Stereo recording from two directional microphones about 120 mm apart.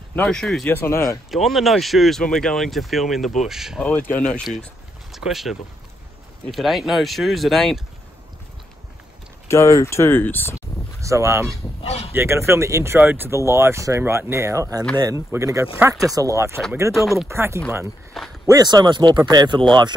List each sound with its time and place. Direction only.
0.1 s speech: 5° left (ahead or behind)
0.7 s speech: 20° left (ahead or behind)
1.3 s speech: centre (ahead or behind)
3.8 s speech: 15° left (ahead or behind)
5.1 s speech: centre (ahead or behind)
9.5 s speech: 25° left (ahead or behind)
11.0 s speech: 25° right (ahead or behind)
11.8 s honk: 60° left (ahead or behind)
12.1 s speech: 20° right (ahead or behind)
18.1 s a sound: centre (ahead or behind)
18.5 s speech: 35° right (ahead or behind)